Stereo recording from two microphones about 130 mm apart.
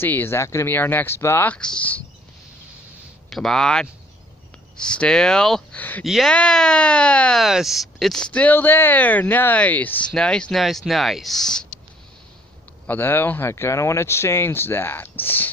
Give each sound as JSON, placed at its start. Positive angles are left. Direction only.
{"t": 0.0, "sound": "speech", "side_deg": 15}
{"t": 3.3, "sound": "speech", "side_deg": 0}
{"t": 6.0, "sound": "speech", "side_deg": 0}
{"t": 12.8, "sound": "speech", "side_deg": 15}